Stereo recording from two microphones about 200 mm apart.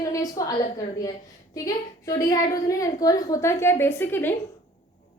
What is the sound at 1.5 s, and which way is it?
A woman's voice, 15° left (ahead or behind).